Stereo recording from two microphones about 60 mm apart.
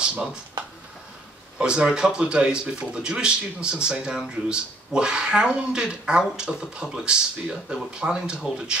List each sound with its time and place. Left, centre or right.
1.6 s speech: centre